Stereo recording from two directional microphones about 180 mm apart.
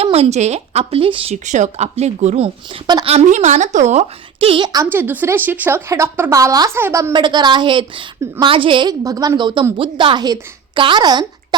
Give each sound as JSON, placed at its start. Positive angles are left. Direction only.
{"t": 0.0, "sound": "speech", "side_deg": -35}